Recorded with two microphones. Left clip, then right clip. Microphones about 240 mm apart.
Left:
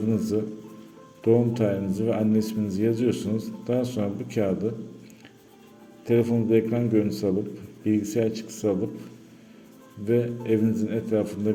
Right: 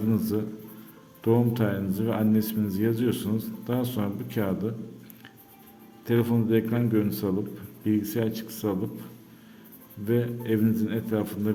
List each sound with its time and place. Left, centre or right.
0.1 s a man's voice: centre
6.1 s a man's voice: centre
10.1 s a man's voice: centre